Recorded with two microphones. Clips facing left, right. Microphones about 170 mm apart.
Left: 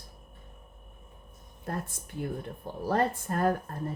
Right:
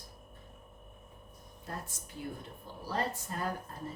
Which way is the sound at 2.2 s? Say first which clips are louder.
Left 7 dB; 55° left (ahead or behind).